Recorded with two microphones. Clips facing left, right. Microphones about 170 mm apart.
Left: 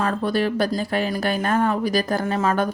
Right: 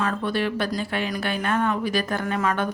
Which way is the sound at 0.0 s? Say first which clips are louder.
Left 3 dB; 40° left (ahead or behind).